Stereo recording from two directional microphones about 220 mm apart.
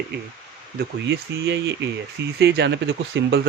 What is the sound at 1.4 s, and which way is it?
Speech, 50° right (ahead or behind).